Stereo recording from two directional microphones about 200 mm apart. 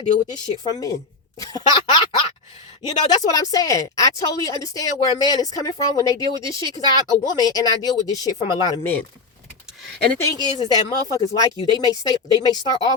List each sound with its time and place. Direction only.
0.0 s speech: 20° left (ahead or behind)
9.9 s speech: 50° right (ahead or behind)
10.2 s speech: 20° left (ahead or behind)